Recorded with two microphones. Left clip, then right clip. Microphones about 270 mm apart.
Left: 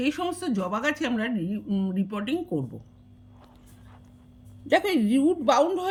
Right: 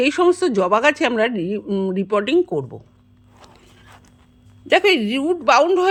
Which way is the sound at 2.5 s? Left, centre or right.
Right.